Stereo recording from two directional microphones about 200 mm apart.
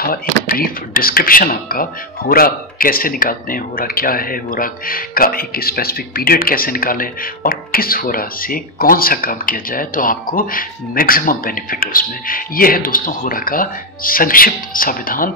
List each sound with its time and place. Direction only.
0.5 s speech: 45° left (ahead or behind)